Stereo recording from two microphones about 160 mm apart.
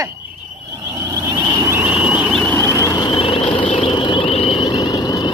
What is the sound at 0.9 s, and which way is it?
Vehicle, 20° right (ahead or behind).